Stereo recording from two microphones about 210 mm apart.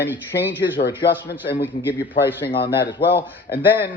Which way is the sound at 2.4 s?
50° left (ahead or behind).